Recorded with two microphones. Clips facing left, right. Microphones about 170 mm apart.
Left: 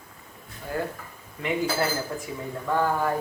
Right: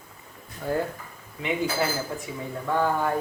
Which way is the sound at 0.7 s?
35° right (ahead or behind).